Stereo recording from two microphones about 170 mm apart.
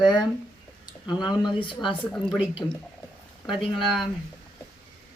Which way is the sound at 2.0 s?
10° left (ahead or behind).